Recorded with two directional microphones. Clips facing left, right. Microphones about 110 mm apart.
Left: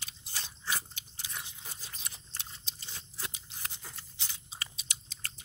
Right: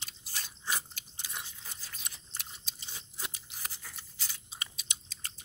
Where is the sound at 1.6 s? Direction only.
20° left (ahead or behind).